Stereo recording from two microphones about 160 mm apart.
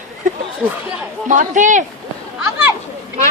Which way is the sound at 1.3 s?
50° right (ahead or behind).